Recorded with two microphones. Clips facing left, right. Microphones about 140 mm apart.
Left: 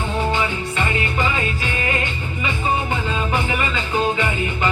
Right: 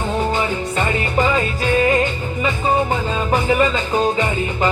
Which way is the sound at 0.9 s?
40° right (ahead or behind).